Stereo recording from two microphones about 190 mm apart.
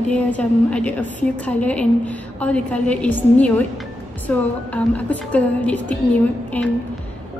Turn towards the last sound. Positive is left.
turn(degrees=5)  # may be behind; listen again after turning